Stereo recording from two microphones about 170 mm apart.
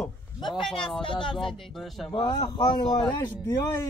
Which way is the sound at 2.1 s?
25° left (ahead or behind).